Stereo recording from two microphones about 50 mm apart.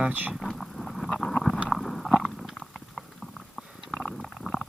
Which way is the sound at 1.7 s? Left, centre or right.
Centre.